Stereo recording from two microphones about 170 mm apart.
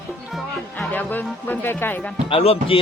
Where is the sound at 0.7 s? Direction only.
10° left (ahead or behind).